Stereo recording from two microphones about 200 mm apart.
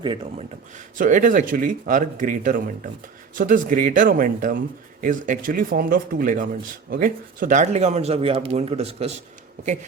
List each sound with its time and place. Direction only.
0.0 s speech: 25° right (ahead or behind)
0.9 s speech: 40° right (ahead or behind)